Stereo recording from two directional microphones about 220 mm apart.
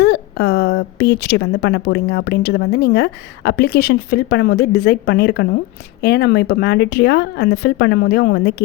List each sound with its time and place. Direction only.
0.0 s a woman's voice: 50° left (ahead or behind)